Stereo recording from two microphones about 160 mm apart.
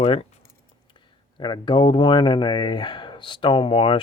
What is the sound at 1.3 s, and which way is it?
Speech, 30° left (ahead or behind).